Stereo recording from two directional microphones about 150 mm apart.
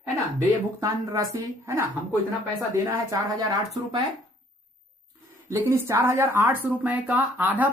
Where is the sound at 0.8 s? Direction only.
20° right (ahead or behind).